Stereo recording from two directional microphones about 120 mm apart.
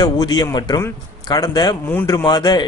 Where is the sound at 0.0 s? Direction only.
35° left (ahead or behind).